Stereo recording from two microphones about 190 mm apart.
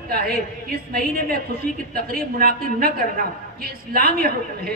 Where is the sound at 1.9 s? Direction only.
50° right (ahead or behind).